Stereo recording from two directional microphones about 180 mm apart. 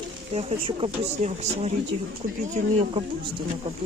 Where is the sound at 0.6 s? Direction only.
35° right (ahead or behind).